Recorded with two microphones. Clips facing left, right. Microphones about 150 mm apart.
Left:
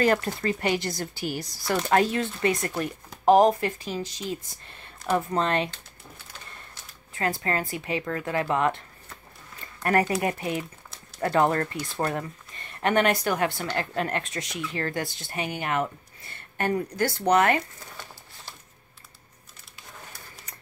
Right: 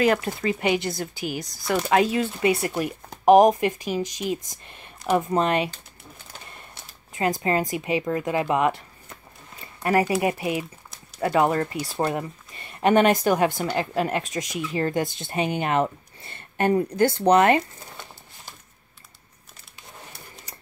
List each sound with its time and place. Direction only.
0.0 s speech: 5° right (ahead or behind)
9.8 s speech: 5° right (ahead or behind); by 18.5 s 20° right (ahead or behind)